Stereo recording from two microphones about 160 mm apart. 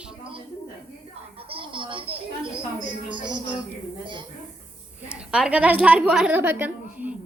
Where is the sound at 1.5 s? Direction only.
30° right (ahead or behind).